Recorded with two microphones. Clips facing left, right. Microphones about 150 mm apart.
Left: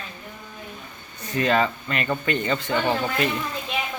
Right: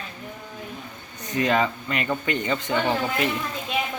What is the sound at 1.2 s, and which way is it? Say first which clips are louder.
Speech: left 1 dB; 15° right (ahead or behind).